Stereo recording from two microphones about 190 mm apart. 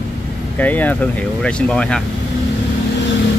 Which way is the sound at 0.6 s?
10° left (ahead or behind).